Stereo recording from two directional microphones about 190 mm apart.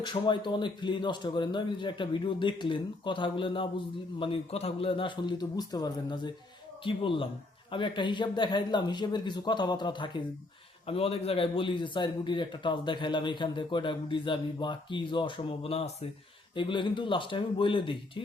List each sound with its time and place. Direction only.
0.0 s a man's voice: 25° left (ahead or behind)